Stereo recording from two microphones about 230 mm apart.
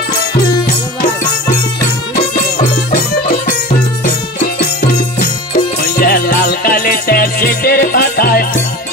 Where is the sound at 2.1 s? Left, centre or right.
Left.